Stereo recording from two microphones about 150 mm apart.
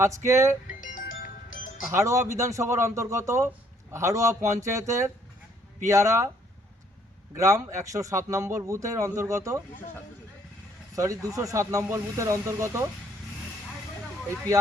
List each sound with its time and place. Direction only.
0.0 s a man's voice: 20° right (ahead or behind)
0.7 s music: 60° left (ahead or behind); by 1.6 s 75° left (ahead or behind)
1.9 s a man's voice: 20° right (ahead or behind)
7.3 s a man's voice: 20° right (ahead or behind)
10.9 s a man's voice: 20° right (ahead or behind)